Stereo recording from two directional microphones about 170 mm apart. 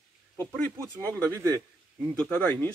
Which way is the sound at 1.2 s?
15° right (ahead or behind).